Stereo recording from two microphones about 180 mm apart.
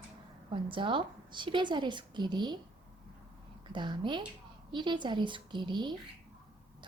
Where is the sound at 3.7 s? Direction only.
25° right (ahead or behind).